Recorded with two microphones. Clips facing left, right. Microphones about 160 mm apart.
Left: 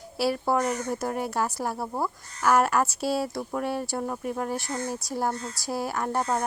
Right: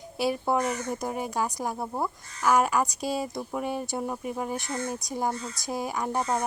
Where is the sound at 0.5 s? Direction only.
Centre (ahead or behind).